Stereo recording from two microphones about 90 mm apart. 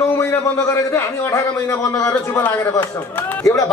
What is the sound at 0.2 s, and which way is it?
A man's voice, 30° left (ahead or behind).